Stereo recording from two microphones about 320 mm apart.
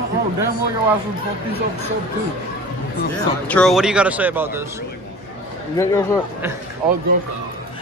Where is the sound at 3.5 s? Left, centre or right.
Centre.